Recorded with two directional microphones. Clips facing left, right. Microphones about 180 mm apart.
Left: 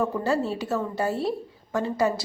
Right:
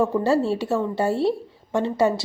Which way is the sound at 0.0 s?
30° right (ahead or behind).